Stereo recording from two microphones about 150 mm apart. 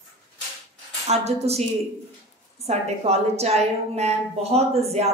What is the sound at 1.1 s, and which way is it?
A woman's voice, 45° right (ahead or behind).